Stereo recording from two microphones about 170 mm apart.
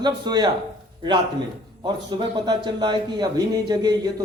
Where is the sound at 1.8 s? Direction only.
25° right (ahead or behind).